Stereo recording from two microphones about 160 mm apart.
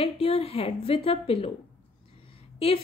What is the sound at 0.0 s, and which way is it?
A woman's voice, 35° left (ahead or behind).